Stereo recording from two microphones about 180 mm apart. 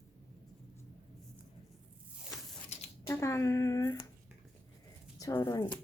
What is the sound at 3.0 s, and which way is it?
Speech, 15° left (ahead or behind).